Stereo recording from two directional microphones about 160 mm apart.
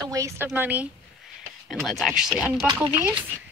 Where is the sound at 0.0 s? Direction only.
20° right (ahead or behind).